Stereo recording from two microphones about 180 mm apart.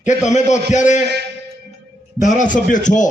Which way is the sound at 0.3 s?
40° left (ahead or behind).